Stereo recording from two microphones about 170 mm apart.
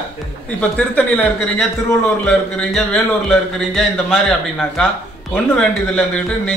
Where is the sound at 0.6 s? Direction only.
10° left (ahead or behind).